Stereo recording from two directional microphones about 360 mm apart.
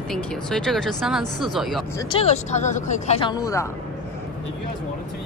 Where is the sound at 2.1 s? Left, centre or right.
Centre.